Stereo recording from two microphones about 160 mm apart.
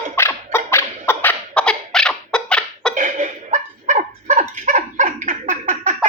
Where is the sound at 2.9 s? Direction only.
50° right (ahead or behind).